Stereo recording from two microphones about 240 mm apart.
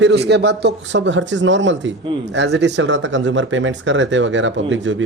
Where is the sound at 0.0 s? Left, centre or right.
Right.